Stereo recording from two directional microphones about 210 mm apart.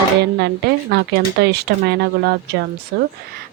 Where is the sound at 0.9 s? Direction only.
50° right (ahead or behind).